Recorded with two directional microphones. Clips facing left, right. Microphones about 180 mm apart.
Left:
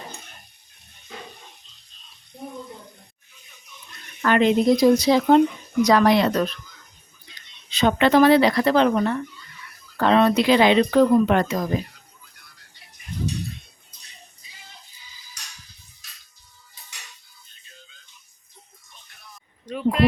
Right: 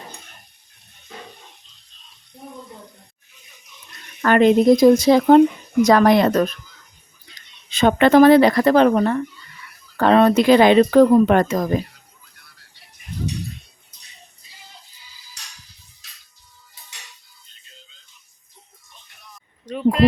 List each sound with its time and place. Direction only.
4.2 s speech: 50° right (ahead or behind)
7.7 s speech: 50° right (ahead or behind)
19.7 s a sound: centre (ahead or behind)